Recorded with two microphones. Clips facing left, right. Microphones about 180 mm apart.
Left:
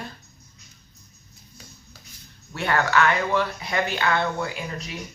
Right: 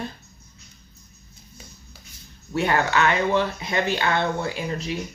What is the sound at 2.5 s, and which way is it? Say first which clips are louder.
Speech: right 1 dB; 20° right (ahead or behind).